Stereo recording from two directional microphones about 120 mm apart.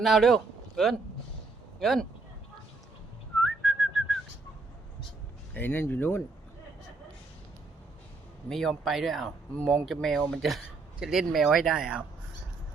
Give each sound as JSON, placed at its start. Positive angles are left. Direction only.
{"t": 0.0, "sound": "speech", "side_deg": 0}
{"t": 3.4, "sound": "whistling", "side_deg": 0}
{"t": 5.5, "sound": "speech", "side_deg": 15}
{"t": 8.4, "sound": "speech", "side_deg": 5}